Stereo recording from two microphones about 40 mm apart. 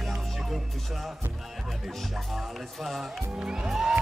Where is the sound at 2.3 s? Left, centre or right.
Centre.